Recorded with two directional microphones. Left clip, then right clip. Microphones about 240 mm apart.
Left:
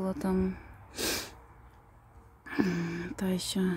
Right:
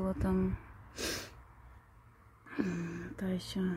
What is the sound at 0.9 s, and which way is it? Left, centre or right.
Sneeze, centre.